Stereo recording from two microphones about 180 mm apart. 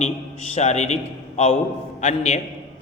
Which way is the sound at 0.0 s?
40° left (ahead or behind).